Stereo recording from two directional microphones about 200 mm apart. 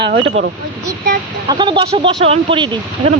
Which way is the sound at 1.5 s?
20° right (ahead or behind).